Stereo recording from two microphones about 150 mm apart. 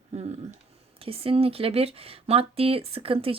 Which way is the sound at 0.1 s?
45° right (ahead or behind).